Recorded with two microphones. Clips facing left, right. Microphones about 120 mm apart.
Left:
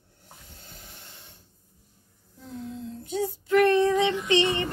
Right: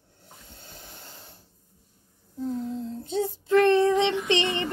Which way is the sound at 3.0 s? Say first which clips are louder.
Left 1 dB; 25° right (ahead or behind).